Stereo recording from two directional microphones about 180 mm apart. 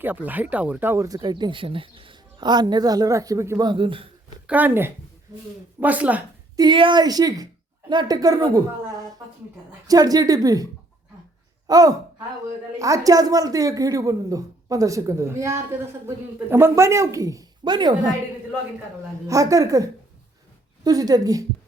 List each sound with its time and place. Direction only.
0.0 s speech: 10° right (ahead or behind); by 4.1 s 30° right (ahead or behind)
4.4 s speech: 10° right (ahead or behind)
6.6 s speech: 25° right (ahead or behind)
9.8 s speech: 20° right (ahead or behind)
11.7 s speech: 20° right (ahead or behind)
19.3 s speech: 20° right (ahead or behind)